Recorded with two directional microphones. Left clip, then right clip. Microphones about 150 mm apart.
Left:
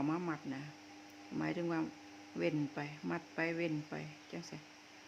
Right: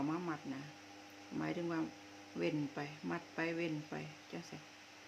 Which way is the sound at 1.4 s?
20° left (ahead or behind).